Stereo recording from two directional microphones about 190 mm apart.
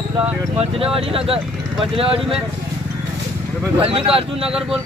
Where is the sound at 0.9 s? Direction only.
30° right (ahead or behind).